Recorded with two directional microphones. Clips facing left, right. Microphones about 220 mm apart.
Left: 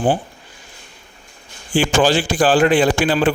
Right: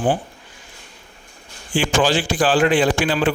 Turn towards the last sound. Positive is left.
turn(degrees=35)  # may be behind; listen again after turning